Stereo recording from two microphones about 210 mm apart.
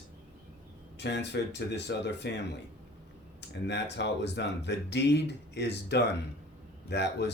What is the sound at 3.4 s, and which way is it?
Speech, 55° left (ahead or behind).